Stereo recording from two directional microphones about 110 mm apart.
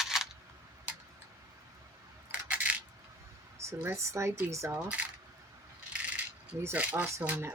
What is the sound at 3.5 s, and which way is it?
Speech, 25° right (ahead or behind).